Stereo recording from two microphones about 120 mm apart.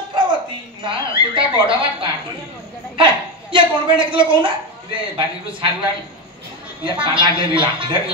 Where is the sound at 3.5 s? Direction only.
45° right (ahead or behind).